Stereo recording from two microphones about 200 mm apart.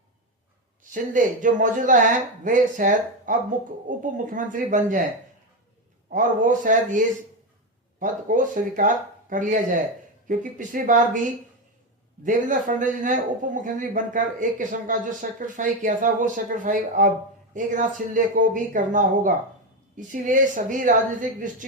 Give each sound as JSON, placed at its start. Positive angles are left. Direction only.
{"t": 0.9, "sound": "speech", "side_deg": -40}
{"t": 6.1, "sound": "speech", "side_deg": -40}
{"t": 12.2, "sound": "speech", "side_deg": -40}